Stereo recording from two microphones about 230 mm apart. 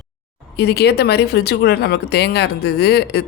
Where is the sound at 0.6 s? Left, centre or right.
Left.